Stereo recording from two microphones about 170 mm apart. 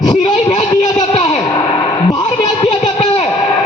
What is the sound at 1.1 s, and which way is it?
Music, 35° left (ahead or behind).